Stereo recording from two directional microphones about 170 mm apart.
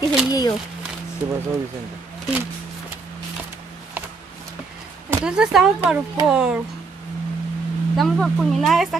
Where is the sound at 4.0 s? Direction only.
10° right (ahead or behind).